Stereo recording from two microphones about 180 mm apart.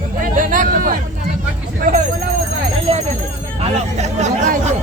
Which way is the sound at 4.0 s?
40° right (ahead or behind).